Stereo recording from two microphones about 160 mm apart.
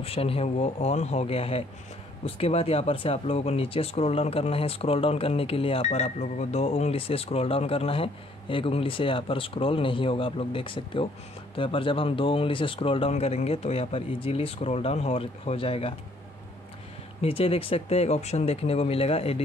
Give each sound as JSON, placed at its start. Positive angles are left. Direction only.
{"t": 0.0, "sound": "speech", "side_deg": 35}
{"t": 17.2, "sound": "speech", "side_deg": 35}